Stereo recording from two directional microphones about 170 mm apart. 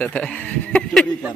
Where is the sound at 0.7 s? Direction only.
5° left (ahead or behind).